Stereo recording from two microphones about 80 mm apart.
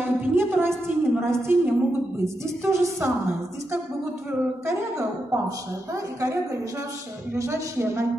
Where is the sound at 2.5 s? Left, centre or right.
Right.